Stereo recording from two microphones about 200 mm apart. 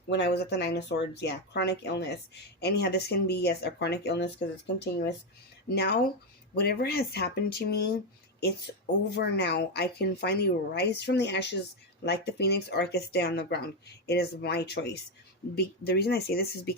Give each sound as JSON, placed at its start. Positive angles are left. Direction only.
{"t": 0.1, "sound": "speech", "side_deg": 60}
{"t": 9.0, "sound": "speech", "side_deg": 55}